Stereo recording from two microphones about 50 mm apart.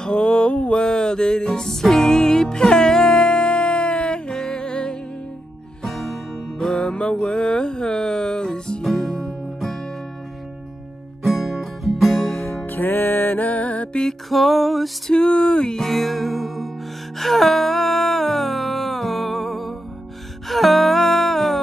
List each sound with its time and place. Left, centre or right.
0.0 s music: centre
5.8 s music: centre
6.7 s music: centre
9.2 s music: centre
11.2 s music: centre
12.3 s music: left
14.3 s music: centre
15.0 s music: centre
17.2 s a sound: centre
20.4 s music: centre